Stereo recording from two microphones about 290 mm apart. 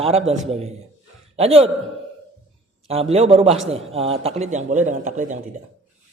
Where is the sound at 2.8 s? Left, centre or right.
Right.